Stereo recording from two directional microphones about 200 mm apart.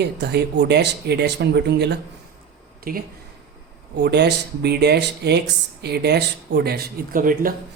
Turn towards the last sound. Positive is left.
turn(degrees=-45)  # may be behind; listen again after turning